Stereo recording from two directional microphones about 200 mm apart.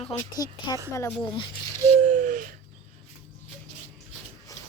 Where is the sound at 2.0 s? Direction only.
35° right (ahead or behind).